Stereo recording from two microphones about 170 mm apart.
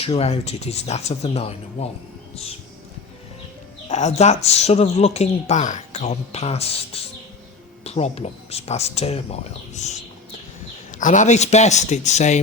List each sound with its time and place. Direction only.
0.0 s speech: 35° left (ahead or behind)
3.8 s a man's voice: 40° left (ahead or behind)